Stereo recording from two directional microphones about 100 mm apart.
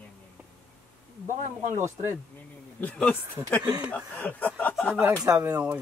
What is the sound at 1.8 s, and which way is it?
Speech, 25° right (ahead or behind).